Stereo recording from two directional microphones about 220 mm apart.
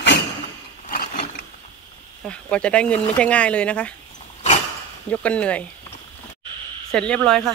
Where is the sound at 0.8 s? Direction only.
40° left (ahead or behind).